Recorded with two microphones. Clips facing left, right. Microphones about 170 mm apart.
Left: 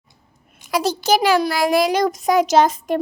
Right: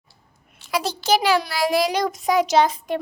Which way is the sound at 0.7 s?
40° left (ahead or behind).